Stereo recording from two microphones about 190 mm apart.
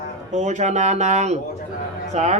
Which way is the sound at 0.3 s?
40° right (ahead or behind).